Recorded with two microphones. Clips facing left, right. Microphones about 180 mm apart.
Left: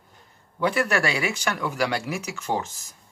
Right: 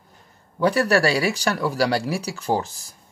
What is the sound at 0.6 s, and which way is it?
Speech, 40° right (ahead or behind).